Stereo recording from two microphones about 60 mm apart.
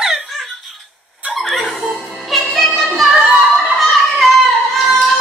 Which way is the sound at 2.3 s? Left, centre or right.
Centre.